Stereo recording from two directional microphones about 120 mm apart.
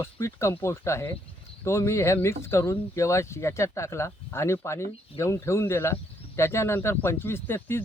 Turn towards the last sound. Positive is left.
turn(degrees=20)  # may be behind; listen again after turning